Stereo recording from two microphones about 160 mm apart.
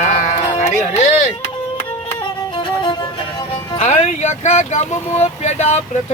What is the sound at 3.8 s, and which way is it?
Speech, 45° left (ahead or behind).